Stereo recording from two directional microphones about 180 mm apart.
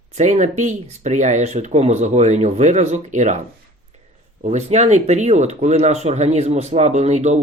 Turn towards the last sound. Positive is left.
turn(degrees=-40)  # may be behind; listen again after turning